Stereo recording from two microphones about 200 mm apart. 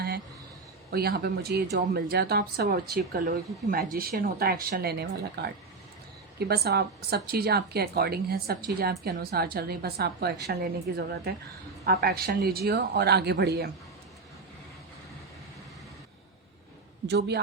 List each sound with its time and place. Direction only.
0.9 s a woman's voice: 50° right (ahead or behind)
17.1 s a man's voice: 55° right (ahead or behind)